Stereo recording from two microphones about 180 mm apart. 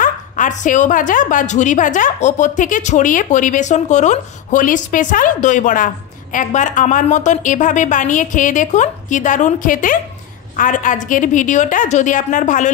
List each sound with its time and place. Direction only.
0.0 s a woman's voice: 45° left (ahead or behind)